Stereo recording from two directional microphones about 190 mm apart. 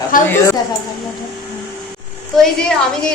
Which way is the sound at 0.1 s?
45° left (ahead or behind).